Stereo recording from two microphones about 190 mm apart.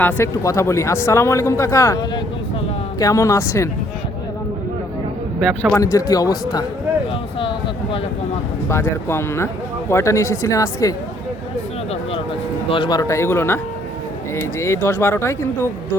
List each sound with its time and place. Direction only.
0.0 s speech: 10° left (ahead or behind)
5.7 s speech: 15° left (ahead or behind)
8.7 s speech: 15° left (ahead or behind)
12.7 s speech: 25° left (ahead or behind)